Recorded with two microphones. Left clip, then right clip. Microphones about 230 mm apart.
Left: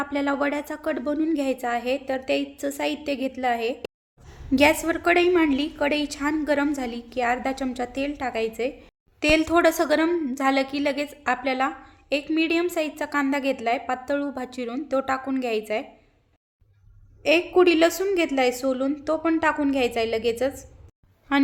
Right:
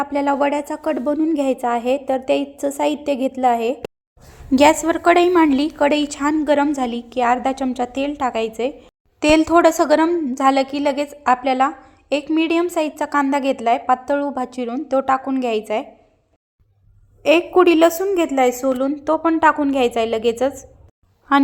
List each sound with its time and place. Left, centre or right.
0.0 s a woman's voice: centre
17.2 s a woman's voice: centre